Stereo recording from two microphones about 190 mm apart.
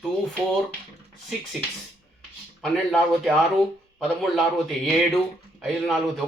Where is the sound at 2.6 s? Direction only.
Centre (ahead or behind).